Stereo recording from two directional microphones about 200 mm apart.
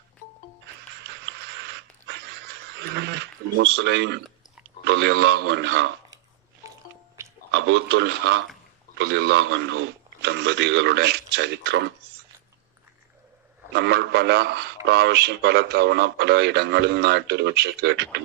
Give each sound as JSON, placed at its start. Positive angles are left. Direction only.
{"t": 0.9, "sound": "a sound", "side_deg": -60}
{"t": 4.9, "sound": "a man's voice", "side_deg": -55}
{"t": 6.6, "sound": "music", "side_deg": -15}
{"t": 7.2, "sound": "a sound", "side_deg": -15}
{"t": 7.5, "sound": "a man's voice", "side_deg": -60}
{"t": 13.7, "sound": "a man's voice", "side_deg": -55}